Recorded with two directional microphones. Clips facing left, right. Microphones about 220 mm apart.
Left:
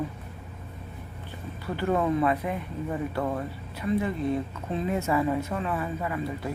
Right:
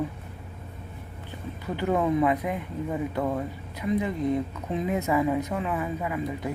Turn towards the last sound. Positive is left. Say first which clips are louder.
# right 1 dB
turn(degrees=-15)  # may be behind; listen again after turning